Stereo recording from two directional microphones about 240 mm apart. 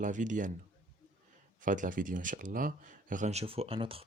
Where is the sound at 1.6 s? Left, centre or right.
Right.